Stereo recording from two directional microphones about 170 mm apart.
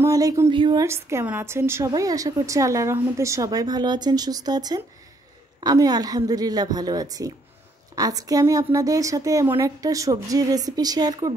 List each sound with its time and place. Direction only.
0.0 s a woman's voice: 20° right (ahead or behind)
0.8 s a woman's voice: 15° right (ahead or behind)